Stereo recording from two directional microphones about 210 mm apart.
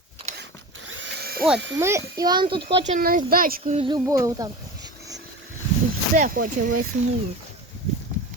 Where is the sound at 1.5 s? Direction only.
60° right (ahead or behind).